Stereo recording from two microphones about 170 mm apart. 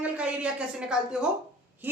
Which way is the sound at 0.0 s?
5° right (ahead or behind).